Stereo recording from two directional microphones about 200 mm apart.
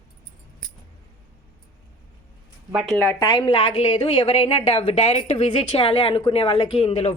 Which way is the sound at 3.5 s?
35° left (ahead or behind).